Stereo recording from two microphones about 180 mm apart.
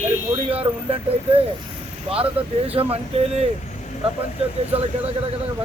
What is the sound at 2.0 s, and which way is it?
Speech, 30° right (ahead or behind).